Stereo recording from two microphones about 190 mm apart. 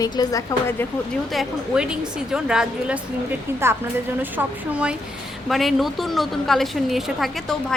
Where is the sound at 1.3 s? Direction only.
Centre (ahead or behind).